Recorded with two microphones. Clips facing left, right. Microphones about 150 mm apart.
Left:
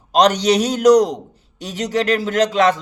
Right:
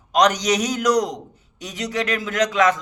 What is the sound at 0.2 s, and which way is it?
A man's voice, 30° left (ahead or behind).